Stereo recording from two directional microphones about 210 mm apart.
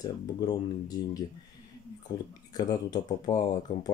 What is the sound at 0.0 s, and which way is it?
Speech, 20° left (ahead or behind).